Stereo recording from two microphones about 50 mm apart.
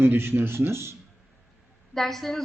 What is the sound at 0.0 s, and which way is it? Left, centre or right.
Speech, right.